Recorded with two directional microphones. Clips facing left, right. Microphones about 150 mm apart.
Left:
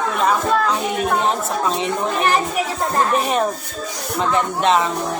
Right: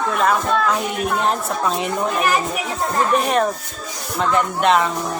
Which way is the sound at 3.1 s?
Centre (ahead or behind).